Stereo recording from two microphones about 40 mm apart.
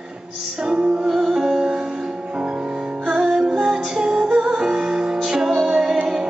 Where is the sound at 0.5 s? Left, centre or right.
Right.